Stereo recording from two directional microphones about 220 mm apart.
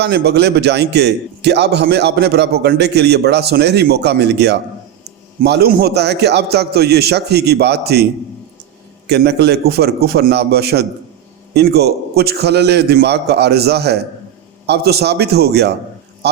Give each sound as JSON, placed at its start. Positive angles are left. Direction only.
{"t": 0.0, "sound": "a man's voice", "side_deg": -50}
{"t": 9.0, "sound": "a man's voice", "side_deg": -50}